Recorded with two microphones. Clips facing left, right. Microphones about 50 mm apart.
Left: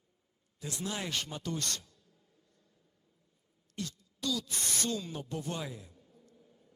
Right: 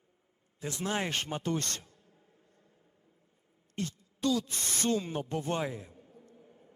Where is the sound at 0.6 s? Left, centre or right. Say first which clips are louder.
Right 5 dB; right.